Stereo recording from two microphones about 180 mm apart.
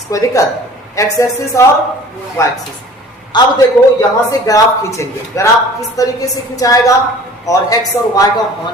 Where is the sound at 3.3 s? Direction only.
25° left (ahead or behind).